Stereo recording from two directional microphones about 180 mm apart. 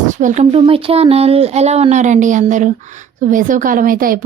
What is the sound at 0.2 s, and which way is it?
Speech, 45° right (ahead or behind).